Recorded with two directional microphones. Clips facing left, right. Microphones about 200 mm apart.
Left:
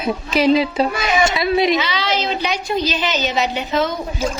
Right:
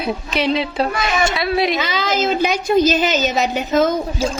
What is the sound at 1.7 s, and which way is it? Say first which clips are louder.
A woman's voice: right 1 dB; 45° right (ahead or behind).